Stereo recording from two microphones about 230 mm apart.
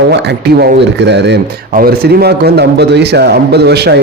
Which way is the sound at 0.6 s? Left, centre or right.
Right.